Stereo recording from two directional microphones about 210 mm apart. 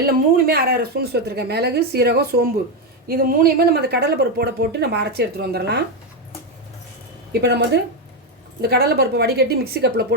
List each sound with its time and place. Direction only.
0.0 s speech: 45° right (ahead or behind)
7.4 s speech: 55° right (ahead or behind)